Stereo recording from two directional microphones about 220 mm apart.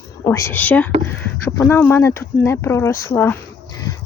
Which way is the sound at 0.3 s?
10° left (ahead or behind).